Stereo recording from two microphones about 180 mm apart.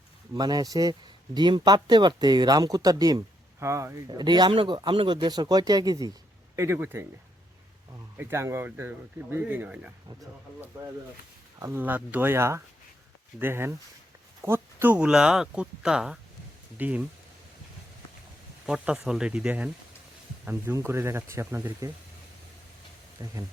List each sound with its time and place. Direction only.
0.3 s speech: 20° right (ahead or behind)
11.6 s speech: 10° right (ahead or behind)
18.6 s speech: 5° right (ahead or behind)
23.2 s speech: 20° right (ahead or behind)